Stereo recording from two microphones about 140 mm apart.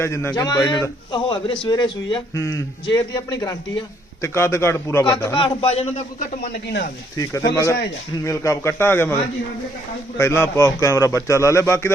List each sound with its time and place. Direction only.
0.0 s a man's voice: 20° left (ahead or behind)
2.3 s a man's voice: 20° left (ahead or behind)
2.8 s a man's voice: 30° left (ahead or behind)
5.3 s a man's voice: 40° left (ahead or behind)
6.1 s a man's voice: 70° left (ahead or behind)
7.2 s a man's voice: 20° left (ahead or behind)
10.2 s a man's voice: 20° left (ahead or behind)